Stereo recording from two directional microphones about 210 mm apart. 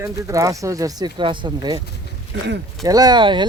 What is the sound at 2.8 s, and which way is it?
Speech, 20° right (ahead or behind).